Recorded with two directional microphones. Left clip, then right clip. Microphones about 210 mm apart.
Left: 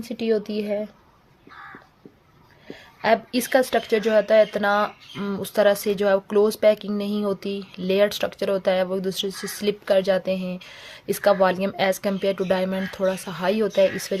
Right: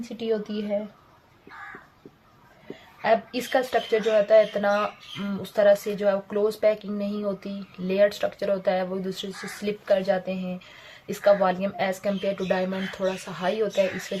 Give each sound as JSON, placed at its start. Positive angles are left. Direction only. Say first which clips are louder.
{"t": 0.2, "sound": "speech", "louder": "left 4 dB", "side_deg": 60}
{"t": 3.0, "sound": "speech", "louder": "left 2 dB", "side_deg": 55}